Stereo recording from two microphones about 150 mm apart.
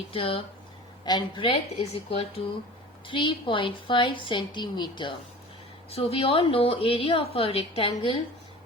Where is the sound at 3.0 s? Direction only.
35° left (ahead or behind).